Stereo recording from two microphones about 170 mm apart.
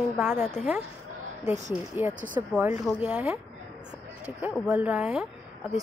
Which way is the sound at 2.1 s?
50° right (ahead or behind).